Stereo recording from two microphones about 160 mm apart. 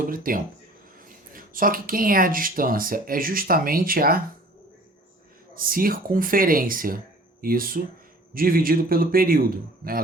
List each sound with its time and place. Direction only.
0.1 s speech: 60° right (ahead or behind)
5.5 s speech: 65° right (ahead or behind)